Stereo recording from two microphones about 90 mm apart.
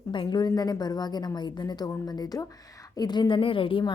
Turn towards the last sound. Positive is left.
turn(degrees=80)